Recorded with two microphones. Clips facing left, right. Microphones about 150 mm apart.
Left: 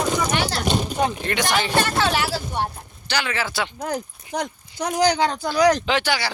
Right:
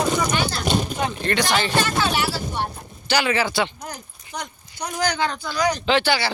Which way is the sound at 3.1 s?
5° right (ahead or behind).